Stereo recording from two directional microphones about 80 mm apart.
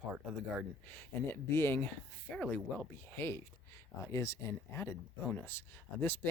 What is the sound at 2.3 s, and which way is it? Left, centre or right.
Speech, centre.